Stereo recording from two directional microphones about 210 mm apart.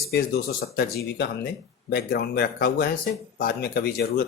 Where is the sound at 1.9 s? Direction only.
50° left (ahead or behind).